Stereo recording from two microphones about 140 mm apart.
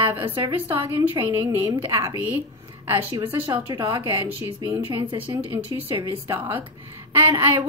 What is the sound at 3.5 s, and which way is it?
Speech, 35° right (ahead or behind).